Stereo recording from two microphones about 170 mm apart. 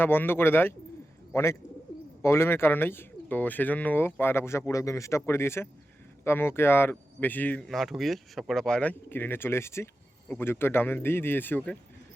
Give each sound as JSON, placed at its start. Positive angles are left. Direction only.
{"t": 0.0, "sound": "speech", "side_deg": 10}